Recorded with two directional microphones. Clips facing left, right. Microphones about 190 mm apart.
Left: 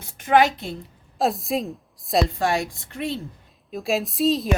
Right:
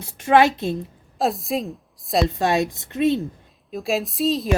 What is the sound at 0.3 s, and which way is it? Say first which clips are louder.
Speech: right 2 dB; 25° right (ahead or behind).